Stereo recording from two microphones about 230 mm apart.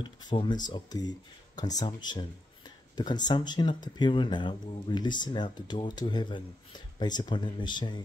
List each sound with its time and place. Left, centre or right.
0.0 s speech: centre